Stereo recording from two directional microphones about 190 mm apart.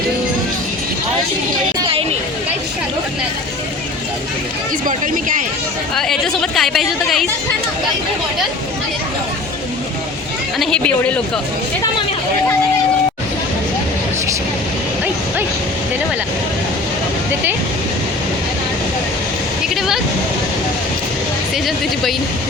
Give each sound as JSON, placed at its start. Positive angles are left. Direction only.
{"t": 4.9, "sound": "speech", "side_deg": -45}
{"t": 5.9, "sound": "a woman's voice", "side_deg": 0}
{"t": 10.6, "sound": "a woman's voice", "side_deg": 5}